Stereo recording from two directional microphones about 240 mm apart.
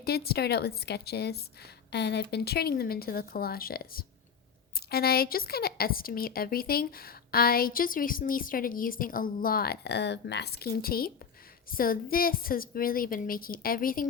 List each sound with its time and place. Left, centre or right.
0.0 s a woman's voice: left